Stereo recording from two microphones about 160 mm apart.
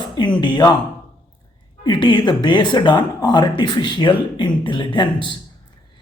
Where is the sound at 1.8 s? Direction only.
30° left (ahead or behind).